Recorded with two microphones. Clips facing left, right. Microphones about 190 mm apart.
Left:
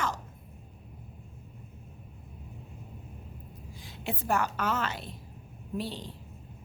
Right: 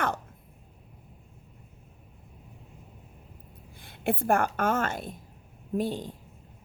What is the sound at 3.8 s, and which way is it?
A woman's voice, 55° right (ahead or behind).